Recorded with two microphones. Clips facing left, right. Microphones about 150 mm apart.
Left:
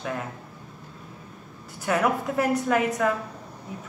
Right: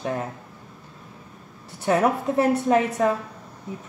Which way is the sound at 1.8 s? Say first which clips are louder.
Right 3 dB; 30° right (ahead or behind).